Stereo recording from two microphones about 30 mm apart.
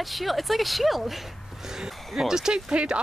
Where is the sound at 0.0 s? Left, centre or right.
Centre.